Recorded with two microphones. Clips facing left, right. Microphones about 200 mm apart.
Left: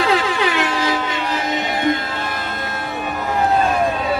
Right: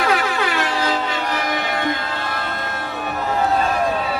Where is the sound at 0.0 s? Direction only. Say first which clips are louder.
Left 2 dB; 25° left (ahead or behind).